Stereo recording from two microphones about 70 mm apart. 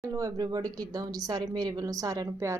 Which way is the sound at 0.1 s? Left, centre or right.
Right.